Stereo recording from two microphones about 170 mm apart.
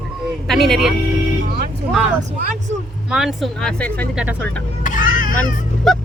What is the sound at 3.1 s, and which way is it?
Speech, centre (ahead or behind).